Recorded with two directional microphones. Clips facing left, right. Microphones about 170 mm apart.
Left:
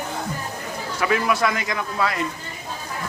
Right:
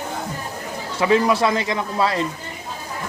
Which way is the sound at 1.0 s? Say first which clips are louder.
Right 4 dB; 25° right (ahead or behind).